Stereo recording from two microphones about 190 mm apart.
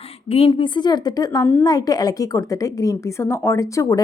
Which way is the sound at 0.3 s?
30° left (ahead or behind).